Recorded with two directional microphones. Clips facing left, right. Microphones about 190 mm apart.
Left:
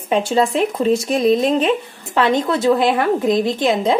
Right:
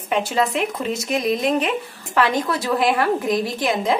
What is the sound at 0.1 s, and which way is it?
Speech, 30° left (ahead or behind).